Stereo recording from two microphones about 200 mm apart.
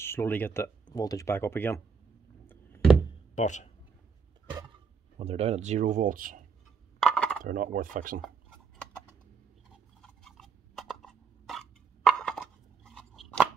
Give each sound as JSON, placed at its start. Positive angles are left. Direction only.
{"t": 0.0, "sound": "speech", "side_deg": 10}
{"t": 2.4, "sound": "a sound", "side_deg": 10}
{"t": 3.3, "sound": "speech", "side_deg": 35}
{"t": 5.2, "sound": "speech", "side_deg": -30}
{"t": 7.0, "sound": "coin", "side_deg": 5}
{"t": 7.4, "sound": "speech", "side_deg": -40}
{"t": 10.0, "sound": "a sound", "side_deg": 0}